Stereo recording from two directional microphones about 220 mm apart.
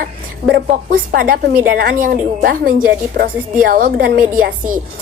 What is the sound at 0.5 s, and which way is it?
A woman's voice, 40° right (ahead or behind).